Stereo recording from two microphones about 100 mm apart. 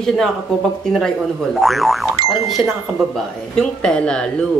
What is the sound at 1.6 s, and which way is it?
A man's voice, centre (ahead or behind).